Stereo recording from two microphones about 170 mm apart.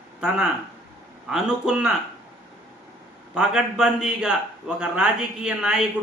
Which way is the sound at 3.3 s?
5° right (ahead or behind).